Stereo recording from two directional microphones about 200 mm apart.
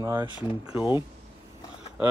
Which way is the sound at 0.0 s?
10° right (ahead or behind).